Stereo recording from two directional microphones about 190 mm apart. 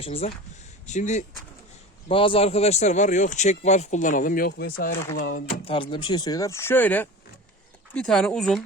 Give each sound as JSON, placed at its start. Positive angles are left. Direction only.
{"t": 0.0, "sound": "a man's voice", "side_deg": 30}
{"t": 2.0, "sound": "a man's voice", "side_deg": 30}
{"t": 5.6, "sound": "speech", "side_deg": 25}